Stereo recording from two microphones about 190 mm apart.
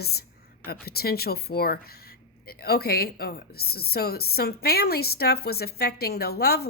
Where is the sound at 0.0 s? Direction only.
55° left (ahead or behind).